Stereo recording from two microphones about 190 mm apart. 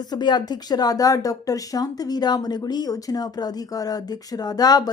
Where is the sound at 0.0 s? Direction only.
20° left (ahead or behind).